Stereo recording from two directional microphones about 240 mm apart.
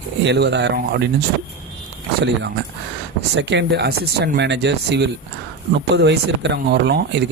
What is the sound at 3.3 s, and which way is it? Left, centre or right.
Speech, right.